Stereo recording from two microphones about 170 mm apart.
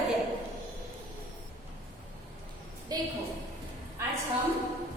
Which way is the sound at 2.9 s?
20° right (ahead or behind).